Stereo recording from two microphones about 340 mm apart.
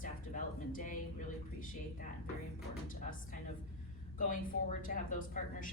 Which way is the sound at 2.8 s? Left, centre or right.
Left.